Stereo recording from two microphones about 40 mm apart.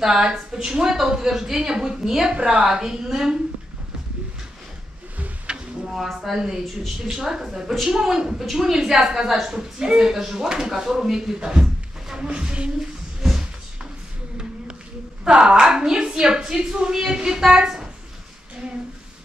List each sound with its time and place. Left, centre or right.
0.0 s a woman's voice: centre
5.5 s a sound: centre
6.3 s a woman's voice: centre
12.3 s speech: right
15.2 s a woman's voice: right